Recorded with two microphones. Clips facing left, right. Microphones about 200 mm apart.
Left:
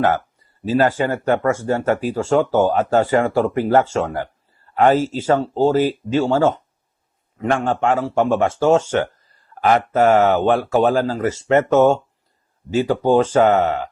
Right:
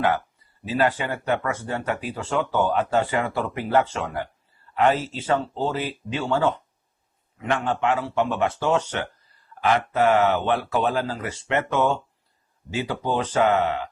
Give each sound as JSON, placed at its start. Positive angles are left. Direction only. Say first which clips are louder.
{"t": 0.0, "sound": "speech", "louder": "left 5 dB", "side_deg": 45}